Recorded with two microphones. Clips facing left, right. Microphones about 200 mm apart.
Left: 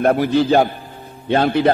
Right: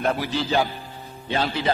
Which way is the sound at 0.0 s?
55° left (ahead or behind).